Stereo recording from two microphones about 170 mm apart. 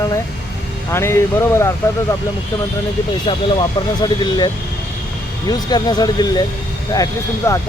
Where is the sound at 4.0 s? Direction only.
25° left (ahead or behind).